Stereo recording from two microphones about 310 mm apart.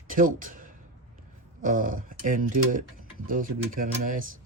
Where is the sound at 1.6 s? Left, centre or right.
Right.